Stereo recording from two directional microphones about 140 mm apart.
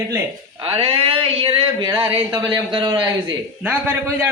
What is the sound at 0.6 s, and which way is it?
A man's voice, 40° right (ahead or behind).